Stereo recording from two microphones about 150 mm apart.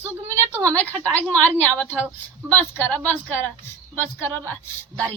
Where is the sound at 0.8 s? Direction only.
10° left (ahead or behind).